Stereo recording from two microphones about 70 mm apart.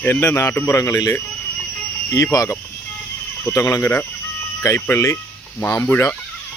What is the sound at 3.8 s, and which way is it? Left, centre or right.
A man's voice, left.